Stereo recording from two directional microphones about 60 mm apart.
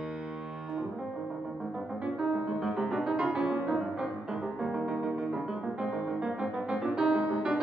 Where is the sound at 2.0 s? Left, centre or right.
Centre.